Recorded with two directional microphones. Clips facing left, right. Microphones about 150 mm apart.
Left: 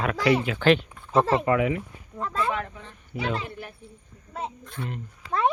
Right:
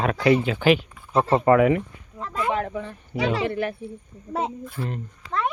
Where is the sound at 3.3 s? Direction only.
80° right.